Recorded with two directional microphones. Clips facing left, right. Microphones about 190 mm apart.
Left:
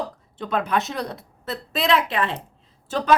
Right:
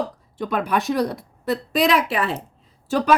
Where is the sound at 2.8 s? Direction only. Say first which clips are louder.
Right 1 dB; 10° right (ahead or behind).